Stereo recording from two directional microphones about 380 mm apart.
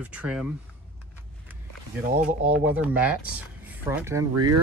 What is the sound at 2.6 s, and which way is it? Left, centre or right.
Speech, centre.